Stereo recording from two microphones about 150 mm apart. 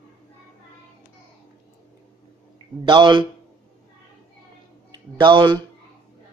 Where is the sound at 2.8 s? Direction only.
30° right (ahead or behind).